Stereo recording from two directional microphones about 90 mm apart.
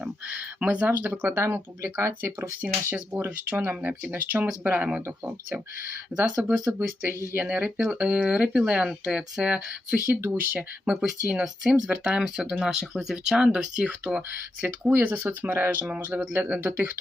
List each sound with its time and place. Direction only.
0.0 s a sound: 15° right (ahead or behind)
1.5 s speech: 30° right (ahead or behind); by 5.0 s 10° right (ahead or behind)
6.1 s speech: 15° right (ahead or behind)